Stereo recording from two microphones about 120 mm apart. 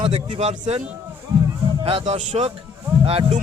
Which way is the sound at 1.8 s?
60° right (ahead or behind).